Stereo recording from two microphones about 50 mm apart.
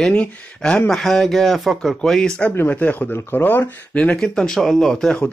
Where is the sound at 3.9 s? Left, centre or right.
Left.